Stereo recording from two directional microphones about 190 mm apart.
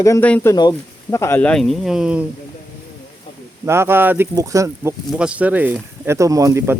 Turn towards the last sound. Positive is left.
turn(degrees=-15)  # may be behind; listen again after turning